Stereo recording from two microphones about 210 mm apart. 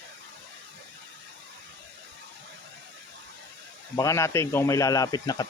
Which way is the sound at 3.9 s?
15° left (ahead or behind).